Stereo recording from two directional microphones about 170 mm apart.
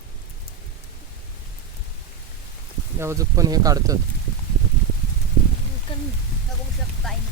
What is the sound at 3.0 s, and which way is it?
Speech, 15° right (ahead or behind).